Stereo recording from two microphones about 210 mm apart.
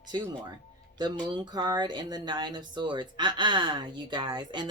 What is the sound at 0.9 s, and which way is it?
Speech, 20° right (ahead or behind).